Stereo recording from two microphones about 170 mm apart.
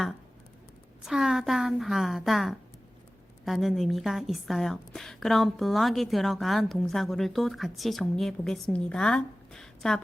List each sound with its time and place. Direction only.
1.0 s a woman's voice: centre (ahead or behind)